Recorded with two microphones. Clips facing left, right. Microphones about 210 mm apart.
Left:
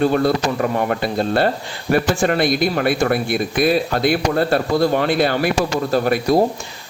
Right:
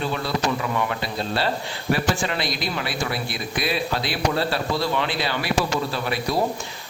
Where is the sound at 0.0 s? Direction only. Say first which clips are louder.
Left 9 dB; 50° left (ahead or behind).